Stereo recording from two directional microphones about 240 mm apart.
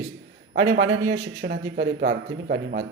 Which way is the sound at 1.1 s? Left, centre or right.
Right.